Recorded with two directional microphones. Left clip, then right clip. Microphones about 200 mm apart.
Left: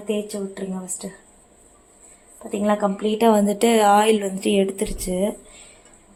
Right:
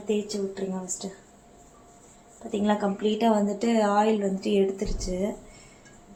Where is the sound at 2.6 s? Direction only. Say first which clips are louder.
Left 5 dB; 35° left (ahead or behind); by 5.2 s 55° left (ahead or behind).